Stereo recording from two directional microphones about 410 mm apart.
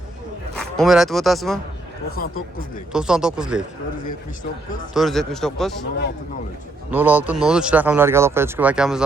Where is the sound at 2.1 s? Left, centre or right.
Left.